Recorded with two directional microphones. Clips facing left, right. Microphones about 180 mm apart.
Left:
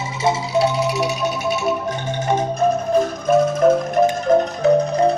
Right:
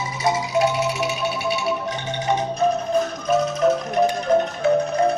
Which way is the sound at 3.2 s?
50° left (ahead or behind).